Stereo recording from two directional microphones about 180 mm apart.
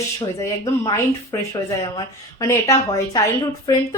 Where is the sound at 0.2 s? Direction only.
20° left (ahead or behind).